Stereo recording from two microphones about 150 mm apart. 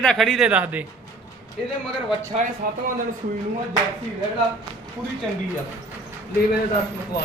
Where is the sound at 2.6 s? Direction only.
90° right.